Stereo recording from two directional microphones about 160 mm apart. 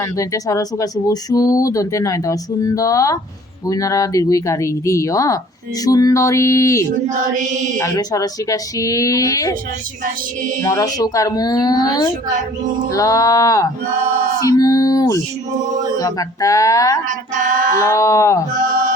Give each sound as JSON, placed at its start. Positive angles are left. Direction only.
{"t": 0.0, "sound": "speech", "side_deg": 20}
{"t": 7.1, "sound": "mantra", "side_deg": -50}
{"t": 7.8, "sound": "speech", "side_deg": 20}
{"t": 10.0, "sound": "music", "side_deg": -55}
{"t": 10.6, "sound": "speech", "side_deg": 20}
{"t": 14.4, "sound": "a sound", "side_deg": 20}
{"t": 16.0, "sound": "speech", "side_deg": 20}
{"t": 17.1, "sound": "music", "side_deg": -55}
{"t": 17.7, "sound": "speech", "side_deg": 20}